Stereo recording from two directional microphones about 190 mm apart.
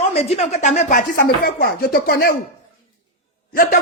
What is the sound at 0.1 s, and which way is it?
Speech, 35° left (ahead or behind).